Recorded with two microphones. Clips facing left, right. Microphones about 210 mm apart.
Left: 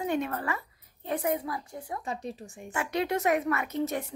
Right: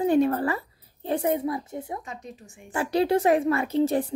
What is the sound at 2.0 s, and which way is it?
Speech, 35° left (ahead or behind).